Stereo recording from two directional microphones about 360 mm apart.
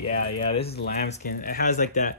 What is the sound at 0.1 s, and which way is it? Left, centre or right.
Speech, left.